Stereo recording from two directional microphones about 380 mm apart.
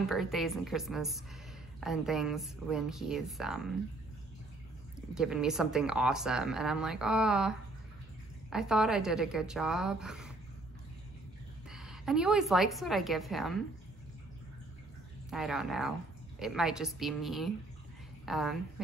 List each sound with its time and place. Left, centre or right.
0.0 s speech: centre
5.1 s speech: centre
11.7 s a woman's voice: centre
15.2 s a woman's voice: centre